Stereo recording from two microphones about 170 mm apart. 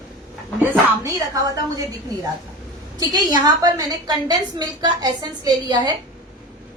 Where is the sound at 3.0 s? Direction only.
20° right (ahead or behind).